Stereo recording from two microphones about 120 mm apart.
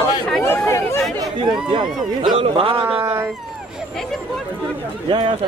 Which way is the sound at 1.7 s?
40° right (ahead or behind).